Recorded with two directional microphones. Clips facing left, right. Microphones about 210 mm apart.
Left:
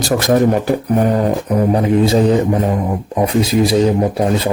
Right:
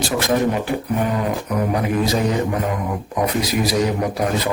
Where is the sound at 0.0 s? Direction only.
40° left (ahead or behind).